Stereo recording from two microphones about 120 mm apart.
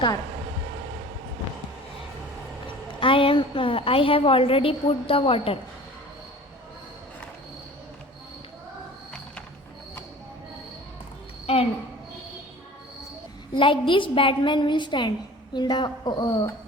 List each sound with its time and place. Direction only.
3.0 s a woman's voice: 45° left (ahead or behind)
11.5 s a sound: 60° left (ahead or behind)
13.5 s a woman's voice: 45° left (ahead or behind)